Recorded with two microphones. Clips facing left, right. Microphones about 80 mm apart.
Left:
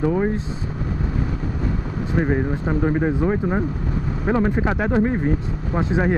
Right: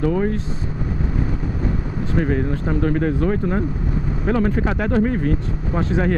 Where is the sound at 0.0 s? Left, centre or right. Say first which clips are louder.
Even; centre.